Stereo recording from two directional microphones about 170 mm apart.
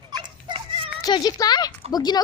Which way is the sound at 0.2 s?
25° right (ahead or behind).